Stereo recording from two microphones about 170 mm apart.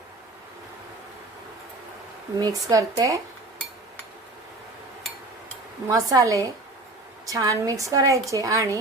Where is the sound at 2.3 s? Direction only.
20° right (ahead or behind).